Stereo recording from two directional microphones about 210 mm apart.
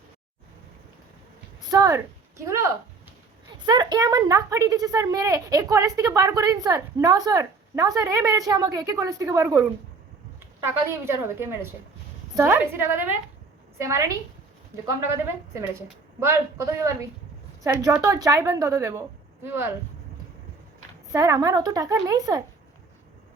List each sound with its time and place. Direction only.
1.7 s a woman's voice: 15° right (ahead or behind)
3.7 s a woman's voice: 20° right (ahead or behind)
16.2 s a woman's voice: 10° right (ahead or behind)
21.1 s a woman's voice: 15° right (ahead or behind)